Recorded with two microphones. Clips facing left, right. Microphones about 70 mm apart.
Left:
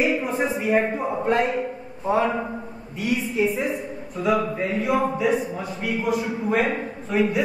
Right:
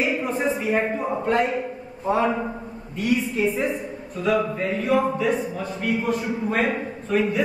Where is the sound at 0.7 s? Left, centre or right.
Centre.